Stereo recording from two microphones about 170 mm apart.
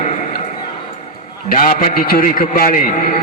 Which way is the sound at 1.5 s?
50° left (ahead or behind).